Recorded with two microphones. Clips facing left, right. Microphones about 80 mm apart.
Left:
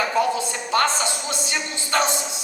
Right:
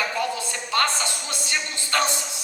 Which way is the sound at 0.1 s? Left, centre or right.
Left.